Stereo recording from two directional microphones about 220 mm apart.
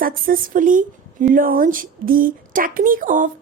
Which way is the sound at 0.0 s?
40° right (ahead or behind).